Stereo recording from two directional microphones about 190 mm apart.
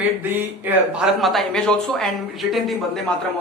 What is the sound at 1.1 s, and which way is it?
Speech, centre (ahead or behind).